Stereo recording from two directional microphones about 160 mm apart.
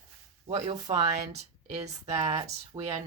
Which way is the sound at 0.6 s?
25° right (ahead or behind).